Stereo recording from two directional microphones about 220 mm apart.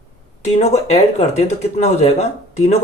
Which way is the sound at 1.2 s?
30° left (ahead or behind).